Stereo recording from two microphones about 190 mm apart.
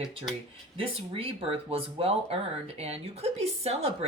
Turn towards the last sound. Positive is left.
turn(degrees=-30)  # may be behind; listen again after turning